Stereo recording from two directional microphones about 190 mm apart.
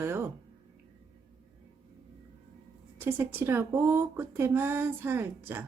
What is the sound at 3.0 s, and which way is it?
Speech, 10° right (ahead or behind).